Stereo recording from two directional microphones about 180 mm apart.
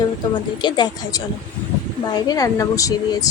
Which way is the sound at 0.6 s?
25° left (ahead or behind).